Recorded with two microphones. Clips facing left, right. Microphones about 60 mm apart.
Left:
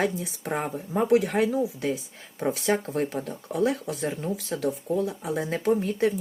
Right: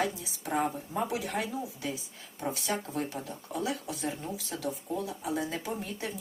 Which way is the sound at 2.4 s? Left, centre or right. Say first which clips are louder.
Left 8 dB; left.